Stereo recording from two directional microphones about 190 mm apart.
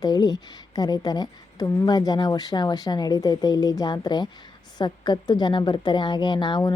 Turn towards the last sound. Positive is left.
turn(degrees=25)  # may be behind; listen again after turning